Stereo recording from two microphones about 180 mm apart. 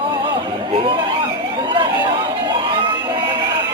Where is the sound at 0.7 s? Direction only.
30° right (ahead or behind).